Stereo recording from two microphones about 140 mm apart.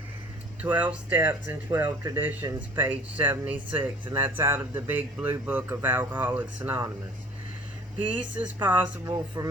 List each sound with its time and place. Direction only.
0.6 s speech: 10° right (ahead or behind)
8.0 s speech: 10° right (ahead or behind)
9.0 s a man's voice: 25° right (ahead or behind)